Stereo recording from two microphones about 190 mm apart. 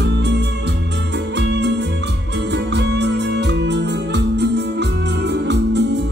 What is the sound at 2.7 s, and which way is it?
Music, 65° right (ahead or behind).